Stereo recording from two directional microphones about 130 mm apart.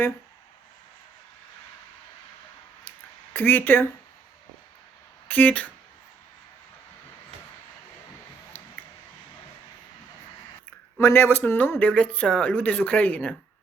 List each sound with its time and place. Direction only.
3.3 s speech: 15° left (ahead or behind)
5.3 s speech: 10° left (ahead or behind)
10.9 s speech: 15° left (ahead or behind)